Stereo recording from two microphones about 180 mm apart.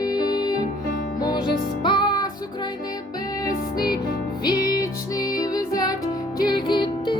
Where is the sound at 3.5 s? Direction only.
55° left (ahead or behind).